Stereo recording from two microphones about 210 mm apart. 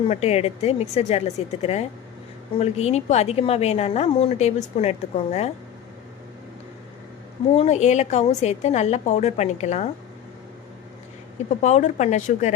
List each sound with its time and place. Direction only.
0.1 s a woman's voice: 30° left (ahead or behind)
7.5 s a woman's voice: 30° left (ahead or behind)
11.6 s a woman's voice: 35° left (ahead or behind)